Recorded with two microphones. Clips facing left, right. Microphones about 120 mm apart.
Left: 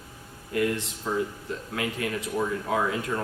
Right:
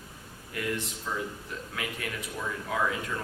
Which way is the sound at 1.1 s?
45° left (ahead or behind).